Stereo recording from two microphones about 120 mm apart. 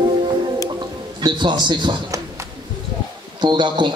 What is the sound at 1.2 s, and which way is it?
Speech, 40° right (ahead or behind).